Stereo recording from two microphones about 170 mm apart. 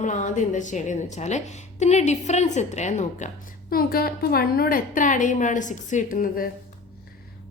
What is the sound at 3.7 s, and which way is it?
Speech, 60° left (ahead or behind).